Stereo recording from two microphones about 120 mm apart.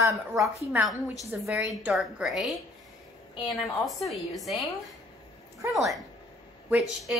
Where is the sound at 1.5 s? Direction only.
10° right (ahead or behind).